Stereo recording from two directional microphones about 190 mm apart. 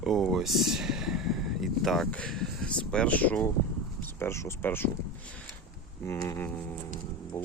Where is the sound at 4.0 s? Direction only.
10° left (ahead or behind).